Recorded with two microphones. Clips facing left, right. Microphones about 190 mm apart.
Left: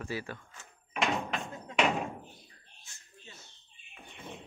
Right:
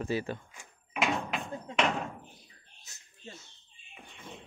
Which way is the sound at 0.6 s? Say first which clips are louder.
Left 2 dB; 5° right (ahead or behind).